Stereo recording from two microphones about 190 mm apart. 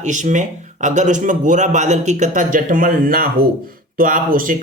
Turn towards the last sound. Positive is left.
turn(degrees=-45)  # may be behind; listen again after turning